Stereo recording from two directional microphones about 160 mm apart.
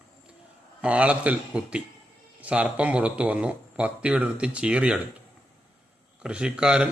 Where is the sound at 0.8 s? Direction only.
10° right (ahead or behind).